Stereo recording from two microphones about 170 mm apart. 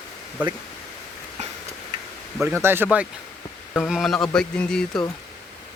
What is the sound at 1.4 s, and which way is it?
Tick-tock, 40° right (ahead or behind).